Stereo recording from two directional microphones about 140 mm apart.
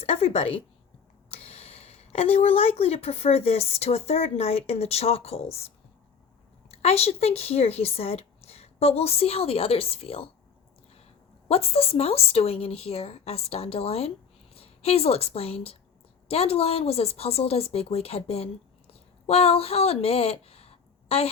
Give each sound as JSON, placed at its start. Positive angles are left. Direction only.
{"t": 0.0, "sound": "speech", "side_deg": 45}
{"t": 11.4, "sound": "speech", "side_deg": 45}